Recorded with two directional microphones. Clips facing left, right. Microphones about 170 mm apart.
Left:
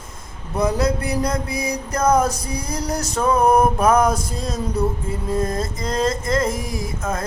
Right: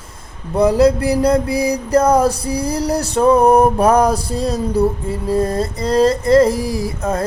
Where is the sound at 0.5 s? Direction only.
30° right (ahead or behind).